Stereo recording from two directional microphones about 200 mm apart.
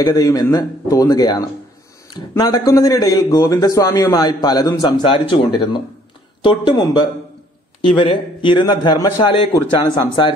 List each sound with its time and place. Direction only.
0.0 s speech: 15° left (ahead or behind)